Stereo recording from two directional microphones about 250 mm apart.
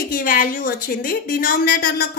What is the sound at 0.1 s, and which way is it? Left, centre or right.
A woman's voice, left.